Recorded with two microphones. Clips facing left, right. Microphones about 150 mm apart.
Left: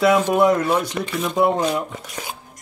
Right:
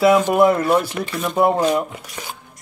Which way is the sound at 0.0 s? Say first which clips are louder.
Right 2 dB; 5° right (ahead or behind).